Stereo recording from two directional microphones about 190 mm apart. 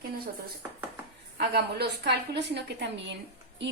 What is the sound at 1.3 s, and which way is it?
A woman's voice, 60° right (ahead or behind).